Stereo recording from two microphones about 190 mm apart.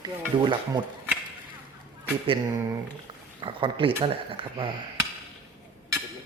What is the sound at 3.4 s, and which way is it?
Speech, 25° right (ahead or behind).